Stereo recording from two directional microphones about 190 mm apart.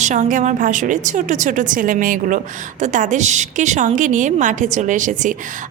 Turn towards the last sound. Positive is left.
turn(degrees=-40)  # may be behind; listen again after turning